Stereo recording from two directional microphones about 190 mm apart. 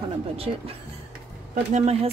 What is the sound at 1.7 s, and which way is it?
Speech, 35° right (ahead or behind).